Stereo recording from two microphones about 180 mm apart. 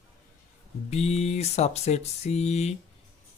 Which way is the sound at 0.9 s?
35° left (ahead or behind).